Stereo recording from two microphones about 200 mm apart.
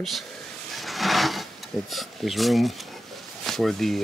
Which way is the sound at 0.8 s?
Centre (ahead or behind).